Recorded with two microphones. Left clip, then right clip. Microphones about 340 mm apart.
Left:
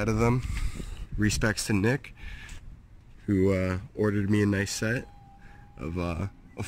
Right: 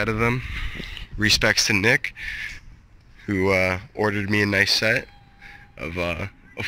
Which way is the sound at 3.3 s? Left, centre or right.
Centre.